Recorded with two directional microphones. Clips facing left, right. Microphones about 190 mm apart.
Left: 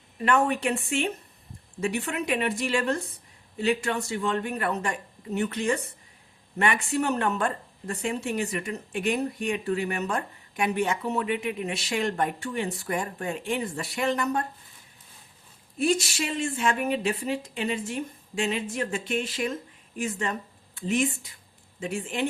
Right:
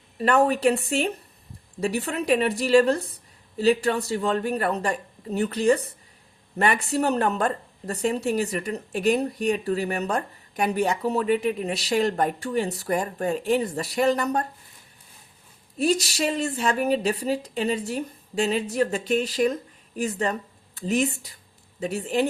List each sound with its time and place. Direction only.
0.2 s speech: 35° right (ahead or behind)
15.8 s speech: 35° right (ahead or behind)